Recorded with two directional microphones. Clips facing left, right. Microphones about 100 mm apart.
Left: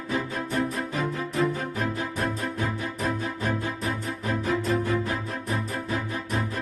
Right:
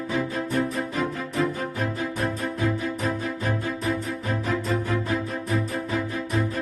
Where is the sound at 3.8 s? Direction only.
Centre (ahead or behind).